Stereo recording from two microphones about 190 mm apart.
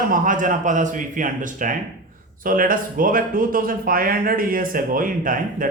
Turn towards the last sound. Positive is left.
turn(degrees=-45)  # may be behind; listen again after turning